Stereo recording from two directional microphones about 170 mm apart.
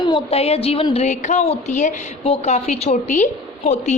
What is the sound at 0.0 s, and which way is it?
A woman's voice, 30° left (ahead or behind).